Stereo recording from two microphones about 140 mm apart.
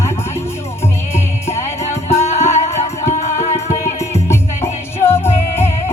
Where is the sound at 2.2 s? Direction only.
50° left (ahead or behind).